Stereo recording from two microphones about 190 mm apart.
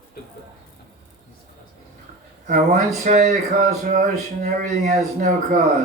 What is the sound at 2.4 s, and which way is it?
Speech, 45° right (ahead or behind).